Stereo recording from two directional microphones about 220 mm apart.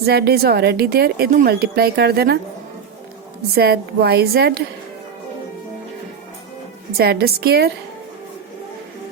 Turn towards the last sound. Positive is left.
turn(degrees=-45)  # may be behind; listen again after turning